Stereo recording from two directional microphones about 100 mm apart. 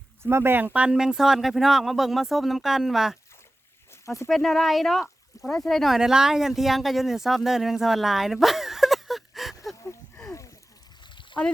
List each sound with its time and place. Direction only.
0.2 s speech: 25° right (ahead or behind); by 3.2 s 5° right (ahead or behind)
4.0 s speech: 30° left (ahead or behind)
4.3 s speech: centre (ahead or behind)
9.7 s a sound: 30° left (ahead or behind)